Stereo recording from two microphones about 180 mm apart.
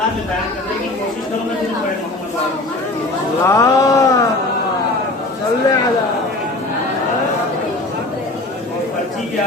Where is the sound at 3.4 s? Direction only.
15° left (ahead or behind).